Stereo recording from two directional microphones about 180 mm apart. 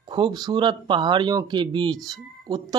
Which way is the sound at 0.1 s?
25° right (ahead or behind).